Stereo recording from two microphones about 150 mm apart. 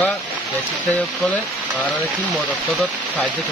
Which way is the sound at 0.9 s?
5° left (ahead or behind).